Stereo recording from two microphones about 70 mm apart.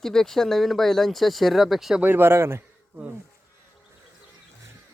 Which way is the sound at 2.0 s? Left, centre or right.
Right.